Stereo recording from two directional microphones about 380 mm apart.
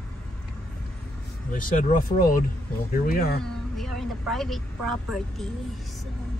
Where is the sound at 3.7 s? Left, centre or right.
Centre.